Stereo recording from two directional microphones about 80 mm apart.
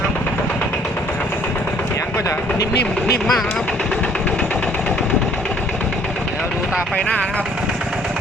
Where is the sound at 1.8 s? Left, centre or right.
Left.